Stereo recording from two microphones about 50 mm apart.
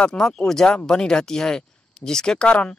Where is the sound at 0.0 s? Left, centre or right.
Centre.